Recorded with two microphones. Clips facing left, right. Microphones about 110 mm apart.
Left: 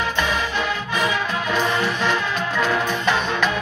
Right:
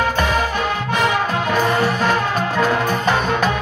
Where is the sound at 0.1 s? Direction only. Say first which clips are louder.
Right 4 dB; 45° right (ahead or behind).